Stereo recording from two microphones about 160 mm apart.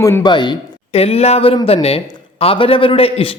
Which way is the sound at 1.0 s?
40° left (ahead or behind).